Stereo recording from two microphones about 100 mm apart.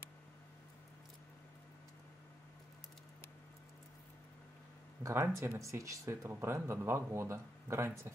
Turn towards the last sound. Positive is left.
turn(degrees=-30)  # may be behind; listen again after turning